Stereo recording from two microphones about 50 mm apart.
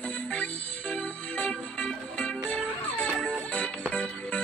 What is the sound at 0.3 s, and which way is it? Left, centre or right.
Music, left.